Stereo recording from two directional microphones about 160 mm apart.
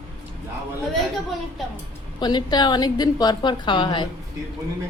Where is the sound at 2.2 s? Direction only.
25° left (ahead or behind).